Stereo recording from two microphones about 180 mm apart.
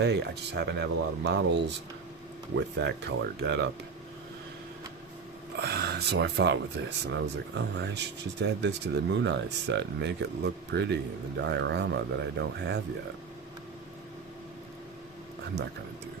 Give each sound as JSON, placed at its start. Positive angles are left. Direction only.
{"t": 0.0, "sound": "speech", "side_deg": -70}
{"t": 5.5, "sound": "speech", "side_deg": -60}